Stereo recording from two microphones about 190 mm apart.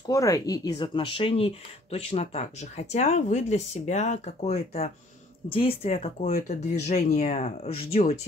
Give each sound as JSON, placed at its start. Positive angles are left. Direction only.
{"t": 0.1, "sound": "speech", "side_deg": 15}